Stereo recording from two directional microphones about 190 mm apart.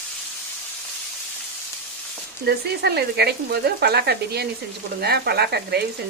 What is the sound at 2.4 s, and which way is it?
Speech, 60° right (ahead or behind).